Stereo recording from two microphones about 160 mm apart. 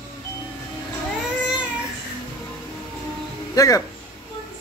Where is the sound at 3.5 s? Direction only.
20° left (ahead or behind).